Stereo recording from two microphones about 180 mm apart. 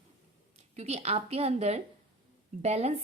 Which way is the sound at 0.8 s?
35° right (ahead or behind).